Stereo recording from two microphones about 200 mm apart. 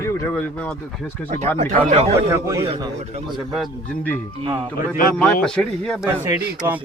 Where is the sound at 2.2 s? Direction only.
15° right (ahead or behind).